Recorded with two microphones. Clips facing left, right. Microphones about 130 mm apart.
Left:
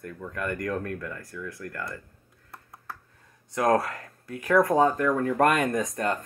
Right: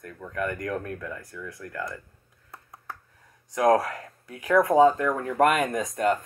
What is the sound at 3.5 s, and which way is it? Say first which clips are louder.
Speech: right 2 dB; 20° right (ahead or behind).